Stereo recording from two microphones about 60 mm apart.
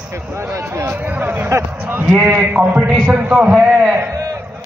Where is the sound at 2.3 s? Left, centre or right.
Right.